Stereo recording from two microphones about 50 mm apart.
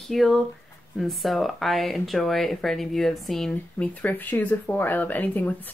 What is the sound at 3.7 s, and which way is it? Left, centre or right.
Speech, left.